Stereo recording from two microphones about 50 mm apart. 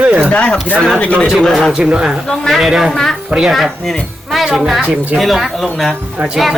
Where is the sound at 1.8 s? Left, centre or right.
Centre.